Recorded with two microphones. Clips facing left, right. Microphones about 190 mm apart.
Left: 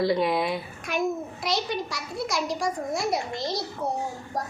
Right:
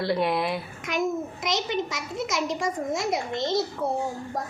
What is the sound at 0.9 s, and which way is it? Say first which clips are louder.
A child's voice: even; 20° right (ahead or behind).